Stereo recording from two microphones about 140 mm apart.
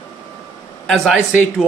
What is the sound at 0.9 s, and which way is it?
Speech, centre (ahead or behind).